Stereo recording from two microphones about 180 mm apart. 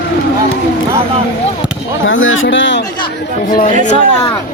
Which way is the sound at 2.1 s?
90° left.